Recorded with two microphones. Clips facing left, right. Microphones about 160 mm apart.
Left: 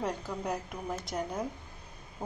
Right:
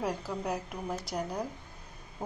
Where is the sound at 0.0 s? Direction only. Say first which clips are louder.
Right 1 dB; 5° right (ahead or behind).